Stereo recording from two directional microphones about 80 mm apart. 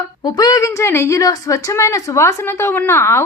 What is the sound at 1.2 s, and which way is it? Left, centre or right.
A woman's voice, left.